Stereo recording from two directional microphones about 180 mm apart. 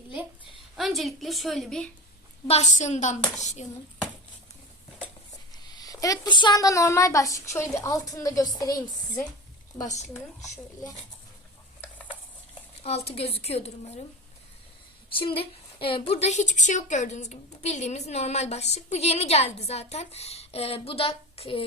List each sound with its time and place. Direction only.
0.8 s a woman's voice: centre (ahead or behind)
2.5 s a woman's voice: 40° left (ahead or behind)
5.6 s speech: 20° left (ahead or behind)
9.9 s a woman's voice: 40° left (ahead or behind)
13.1 s a woman's voice: 35° left (ahead or behind)
15.1 s a woman's voice: 30° left (ahead or behind)